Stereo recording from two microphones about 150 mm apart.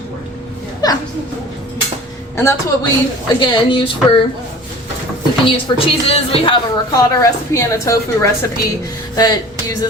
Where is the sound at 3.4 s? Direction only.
30° left (ahead or behind).